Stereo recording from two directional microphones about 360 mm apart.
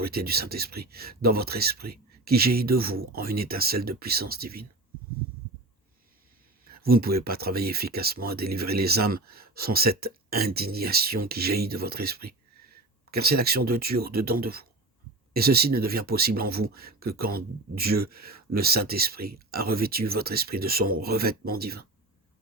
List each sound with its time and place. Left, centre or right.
0.0 s speech: right
6.8 s speech: right